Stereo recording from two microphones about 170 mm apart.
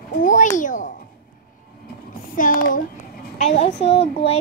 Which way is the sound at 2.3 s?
50° left (ahead or behind).